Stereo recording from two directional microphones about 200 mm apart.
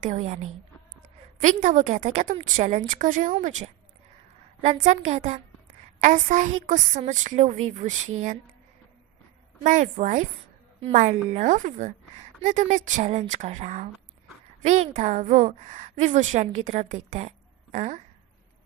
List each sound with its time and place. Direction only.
0.0 s a woman's voice: 35° right (ahead or behind)
1.4 s a woman's voice: 40° right (ahead or behind)
4.8 s a woman's voice: 35° right (ahead or behind)
9.6 s a woman's voice: 40° right (ahead or behind)